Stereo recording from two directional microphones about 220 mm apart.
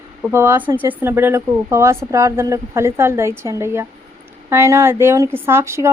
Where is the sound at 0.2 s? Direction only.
10° right (ahead or behind).